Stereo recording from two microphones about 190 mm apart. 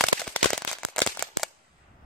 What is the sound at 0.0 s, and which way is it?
Crumpling, 5° left (ahead or behind).